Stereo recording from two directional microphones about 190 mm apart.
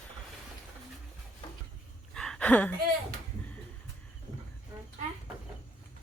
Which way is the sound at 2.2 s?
5° left (ahead or behind).